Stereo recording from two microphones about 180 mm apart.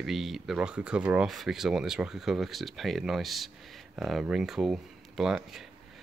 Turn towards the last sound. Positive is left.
turn(degrees=0)  # may be behind; listen again after turning